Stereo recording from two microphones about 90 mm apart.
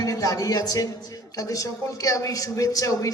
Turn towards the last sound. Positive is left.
turn(degrees=40)  # may be behind; listen again after turning